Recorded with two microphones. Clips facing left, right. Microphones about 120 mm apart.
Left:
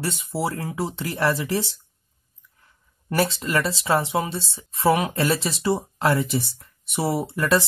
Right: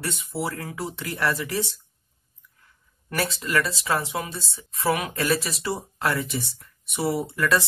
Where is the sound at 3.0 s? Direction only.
25° left (ahead or behind).